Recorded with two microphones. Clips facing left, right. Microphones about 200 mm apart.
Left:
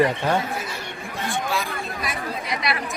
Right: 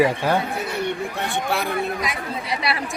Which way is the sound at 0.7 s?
65° right (ahead or behind).